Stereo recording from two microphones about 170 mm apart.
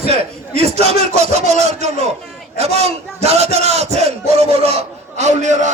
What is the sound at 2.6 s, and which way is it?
Battle cry, 40° right (ahead or behind).